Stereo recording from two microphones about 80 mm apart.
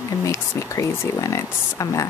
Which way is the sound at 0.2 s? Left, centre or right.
Left.